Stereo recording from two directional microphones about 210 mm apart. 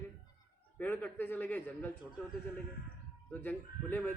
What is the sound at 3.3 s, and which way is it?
Speech, 10° left (ahead or behind).